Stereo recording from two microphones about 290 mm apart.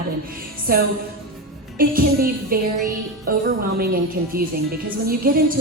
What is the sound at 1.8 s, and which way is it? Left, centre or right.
Music, right.